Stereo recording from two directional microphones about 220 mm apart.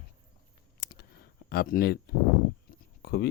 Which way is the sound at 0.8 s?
45° left (ahead or behind).